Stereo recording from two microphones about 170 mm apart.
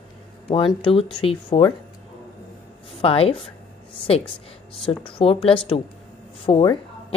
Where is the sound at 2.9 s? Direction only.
35° left (ahead or behind).